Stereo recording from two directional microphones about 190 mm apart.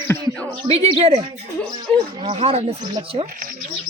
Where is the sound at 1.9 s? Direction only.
5° left (ahead or behind).